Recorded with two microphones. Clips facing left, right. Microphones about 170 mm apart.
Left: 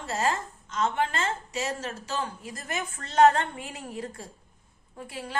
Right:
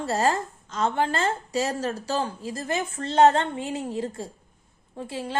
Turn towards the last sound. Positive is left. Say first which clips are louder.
# right 4 dB
turn(degrees=-25)  # may be behind; listen again after turning